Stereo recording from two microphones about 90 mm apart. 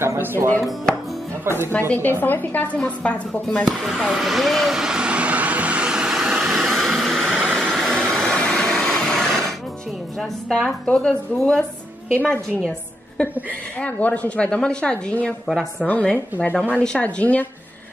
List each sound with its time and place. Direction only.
0.0 s speech: 25° right (ahead or behind)
1.7 s a woman's voice: 20° left (ahead or behind)
3.6 s a woman's voice: centre (ahead or behind)
4.1 s vehicle: 5° right (ahead or behind)
7.5 s vacuum cleaner: 5° left (ahead or behind)
10.1 s a woman's voice: centre (ahead or behind)
13.7 s a woman's voice: 15° left (ahead or behind)
15.4 s a woman's voice: centre (ahead or behind)
15.9 s a woman's voice: 15° left (ahead or behind)